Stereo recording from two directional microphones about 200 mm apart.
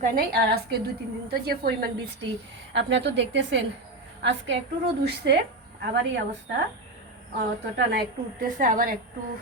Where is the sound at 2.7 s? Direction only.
60° right (ahead or behind).